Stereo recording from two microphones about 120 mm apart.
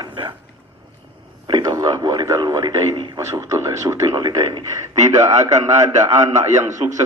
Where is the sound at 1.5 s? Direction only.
30° right (ahead or behind).